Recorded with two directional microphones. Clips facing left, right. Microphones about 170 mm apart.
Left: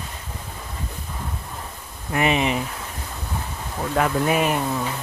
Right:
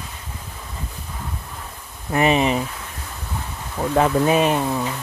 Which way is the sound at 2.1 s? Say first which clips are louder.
Right 3 dB; 35° right (ahead or behind).